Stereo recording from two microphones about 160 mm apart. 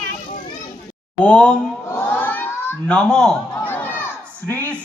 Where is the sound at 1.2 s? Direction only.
5° left (ahead or behind).